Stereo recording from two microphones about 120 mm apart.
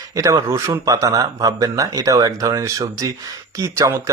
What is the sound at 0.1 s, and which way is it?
Speech, 25° right (ahead or behind).